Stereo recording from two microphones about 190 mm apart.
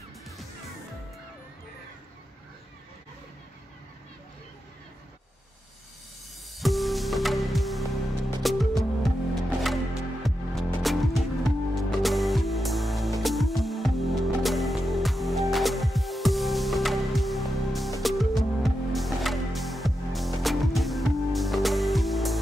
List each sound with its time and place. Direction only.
6.6 s music: centre (ahead or behind)